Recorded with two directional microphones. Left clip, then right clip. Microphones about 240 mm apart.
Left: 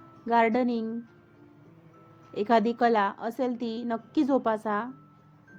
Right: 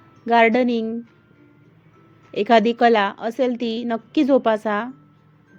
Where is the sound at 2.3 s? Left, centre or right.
Centre.